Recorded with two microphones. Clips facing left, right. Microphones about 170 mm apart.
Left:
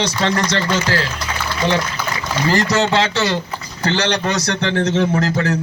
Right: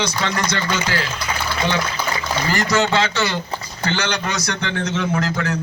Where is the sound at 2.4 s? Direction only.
35° left (ahead or behind).